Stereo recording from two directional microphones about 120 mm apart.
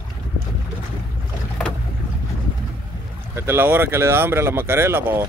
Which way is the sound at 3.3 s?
20° right (ahead or behind).